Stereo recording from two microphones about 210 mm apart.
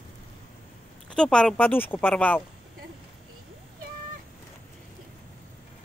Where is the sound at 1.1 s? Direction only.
5° left (ahead or behind).